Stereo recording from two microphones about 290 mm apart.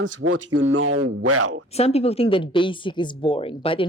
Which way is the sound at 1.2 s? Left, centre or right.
Right.